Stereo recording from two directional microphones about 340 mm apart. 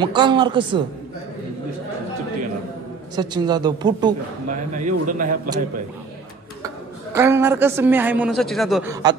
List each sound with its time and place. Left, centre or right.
0.0 s a woman's voice: centre
3.2 s a woman's voice: centre
4.5 s a man's voice: right
7.2 s a man's voice: centre